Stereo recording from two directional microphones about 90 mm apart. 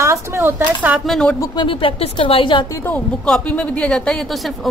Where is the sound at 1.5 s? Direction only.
70° left (ahead or behind).